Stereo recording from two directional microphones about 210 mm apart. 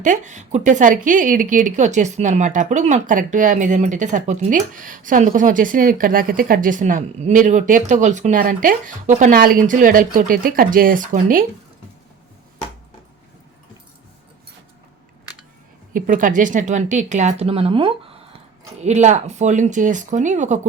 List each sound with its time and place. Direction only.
0.0 s a woman's voice: 35° right (ahead or behind)
15.9 s a woman's voice: 40° right (ahead or behind)